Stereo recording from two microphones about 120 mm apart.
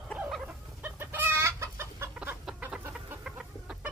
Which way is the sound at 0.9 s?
20° right (ahead or behind).